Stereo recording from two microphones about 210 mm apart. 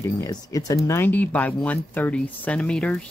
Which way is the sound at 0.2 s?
15° left (ahead or behind).